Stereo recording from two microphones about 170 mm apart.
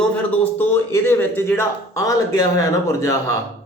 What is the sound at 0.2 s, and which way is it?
A man's voice, 10° left (ahead or behind).